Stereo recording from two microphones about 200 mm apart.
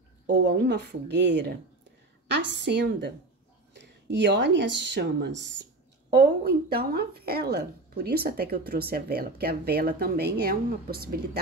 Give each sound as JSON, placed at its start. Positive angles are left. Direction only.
{"t": 0.3, "sound": "a woman's voice", "side_deg": -60}